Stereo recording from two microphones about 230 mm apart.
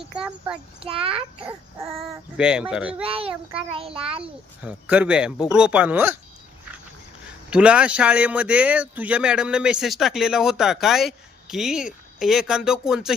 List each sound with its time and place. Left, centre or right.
0.1 s a man's voice: centre
0.8 s a child's voice: right
2.0 s a man's voice: centre
3.0 s a child's voice: right
4.6 s a man's voice: centre
7.5 s a man's voice: centre